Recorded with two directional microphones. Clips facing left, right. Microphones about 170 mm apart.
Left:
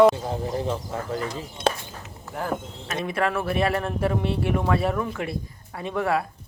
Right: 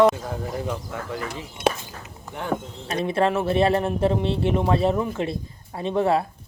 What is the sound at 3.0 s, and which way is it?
Speech, 30° right (ahead or behind).